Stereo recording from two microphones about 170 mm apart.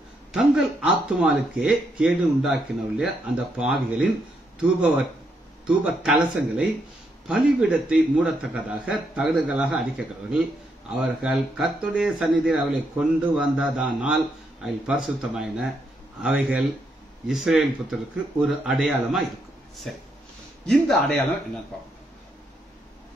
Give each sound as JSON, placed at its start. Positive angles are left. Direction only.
{"t": 0.3, "sound": "a man's voice", "side_deg": -5}